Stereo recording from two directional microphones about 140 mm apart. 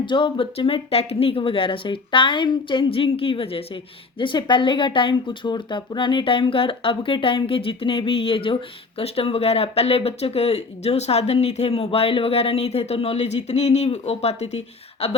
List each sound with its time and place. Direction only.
0.0 s speech: 35° left (ahead or behind)